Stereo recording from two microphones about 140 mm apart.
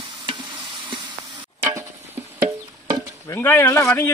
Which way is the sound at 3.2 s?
15° left (ahead or behind).